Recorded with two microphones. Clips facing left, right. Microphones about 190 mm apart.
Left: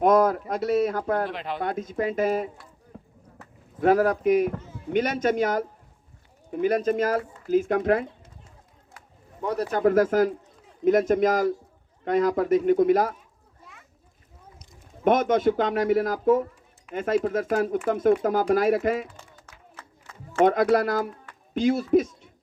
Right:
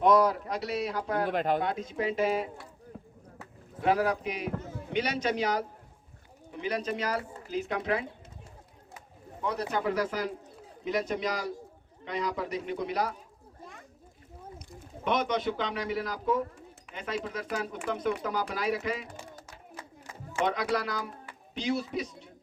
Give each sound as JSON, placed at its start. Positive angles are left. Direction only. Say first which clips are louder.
{"t": 0.0, "sound": "speech", "louder": "left 4 dB", "side_deg": 50}
{"t": 1.3, "sound": "speech", "louder": "right 4 dB", "side_deg": -45}
{"t": 1.6, "sound": "speech", "louder": "left 4 dB", "side_deg": 50}
{"t": 3.8, "sound": "speech", "louder": "left 6 dB", "side_deg": 50}
{"t": 9.7, "sound": "speech", "louder": "left 12 dB", "side_deg": 50}
{"t": 15.0, "sound": "speech", "louder": "left 8 dB", "side_deg": 50}
{"t": 19.7, "sound": "a sound", "louder": "right 3 dB", "side_deg": -10}
{"t": 20.4, "sound": "a man's voice", "louder": "left 10 dB", "side_deg": 50}